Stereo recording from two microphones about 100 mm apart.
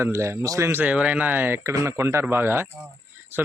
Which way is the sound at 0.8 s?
15° right (ahead or behind).